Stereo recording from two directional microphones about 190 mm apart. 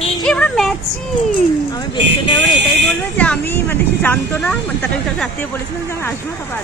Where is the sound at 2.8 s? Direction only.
5° left (ahead or behind).